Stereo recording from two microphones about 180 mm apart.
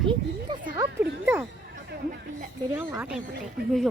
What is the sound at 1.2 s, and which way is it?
Speech, 10° right (ahead or behind).